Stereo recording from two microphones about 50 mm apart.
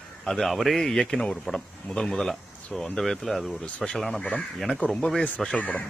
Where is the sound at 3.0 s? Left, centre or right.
Centre.